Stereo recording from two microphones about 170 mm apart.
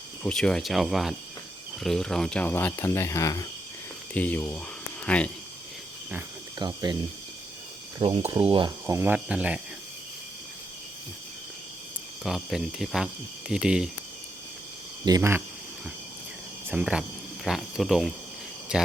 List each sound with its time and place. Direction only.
0.2 s speech: 5° left (ahead or behind)
4.1 s speech: 10° left (ahead or behind)
6.6 s cricket: 25° right (ahead or behind)
7.9 s cricket: 30° right (ahead or behind)
8.9 s speech: 10° right (ahead or behind)
12.2 s speech: centre (ahead or behind)
15.0 s cricket: 20° right (ahead or behind)
16.6 s speech: 5° right (ahead or behind)